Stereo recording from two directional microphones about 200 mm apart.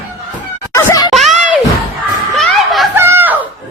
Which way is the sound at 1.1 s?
Centre (ahead or behind).